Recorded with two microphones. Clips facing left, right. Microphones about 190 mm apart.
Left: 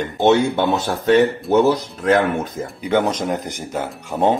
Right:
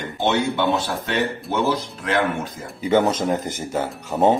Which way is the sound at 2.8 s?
5° right (ahead or behind).